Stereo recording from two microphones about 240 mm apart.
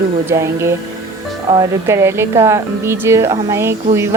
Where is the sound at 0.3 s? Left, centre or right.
Centre.